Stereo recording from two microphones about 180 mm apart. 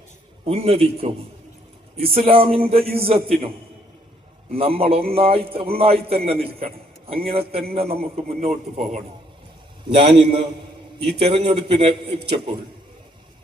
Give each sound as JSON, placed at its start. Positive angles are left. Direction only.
{"t": 0.4, "sound": "a man's voice", "side_deg": -35}
{"t": 4.5, "sound": "a man's voice", "side_deg": -35}
{"t": 11.4, "sound": "a man's voice", "side_deg": -30}